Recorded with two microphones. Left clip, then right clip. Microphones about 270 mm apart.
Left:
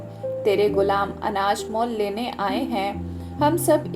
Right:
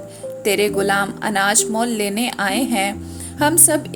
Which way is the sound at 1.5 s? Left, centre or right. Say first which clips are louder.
Right 4 dB; right.